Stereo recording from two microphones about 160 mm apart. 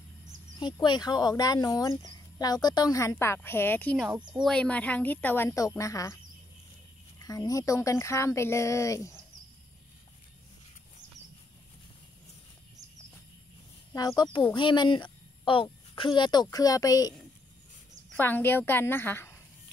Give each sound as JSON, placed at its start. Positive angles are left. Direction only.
{"t": 0.6, "sound": "a woman's voice", "side_deg": 30}
{"t": 7.2, "sound": "speech", "side_deg": 20}
{"t": 13.9, "sound": "speech", "side_deg": 25}
{"t": 18.1, "sound": "a woman's voice", "side_deg": 10}